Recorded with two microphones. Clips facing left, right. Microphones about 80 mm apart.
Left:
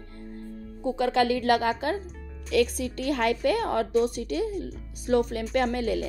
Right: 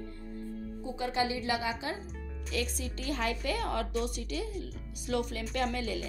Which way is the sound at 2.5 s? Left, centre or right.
Left.